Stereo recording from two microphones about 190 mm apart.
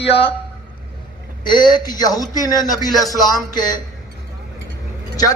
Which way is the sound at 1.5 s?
20° left (ahead or behind).